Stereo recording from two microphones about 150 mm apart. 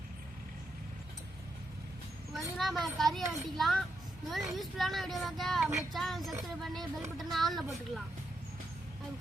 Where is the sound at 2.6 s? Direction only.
Centre (ahead or behind).